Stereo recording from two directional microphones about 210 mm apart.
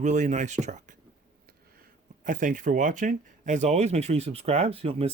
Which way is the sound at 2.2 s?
40° right (ahead or behind).